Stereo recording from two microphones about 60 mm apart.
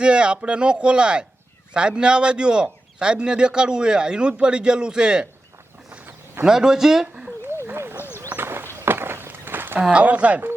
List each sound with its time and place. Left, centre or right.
0.0 s a man's voice: centre
6.4 s a man's voice: centre
7.6 s a sound: right
9.9 s speech: right